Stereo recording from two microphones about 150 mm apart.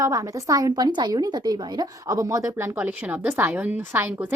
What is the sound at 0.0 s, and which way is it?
A woman's voice, 20° right (ahead or behind).